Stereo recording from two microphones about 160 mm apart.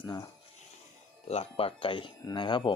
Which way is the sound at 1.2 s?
40° left (ahead or behind).